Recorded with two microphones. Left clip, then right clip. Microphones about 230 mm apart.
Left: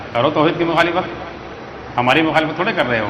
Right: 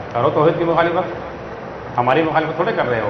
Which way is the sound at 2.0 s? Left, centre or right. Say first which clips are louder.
Left 1 dB; left.